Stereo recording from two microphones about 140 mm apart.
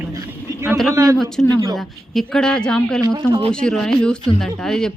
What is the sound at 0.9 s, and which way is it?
Speech, 25° right (ahead or behind).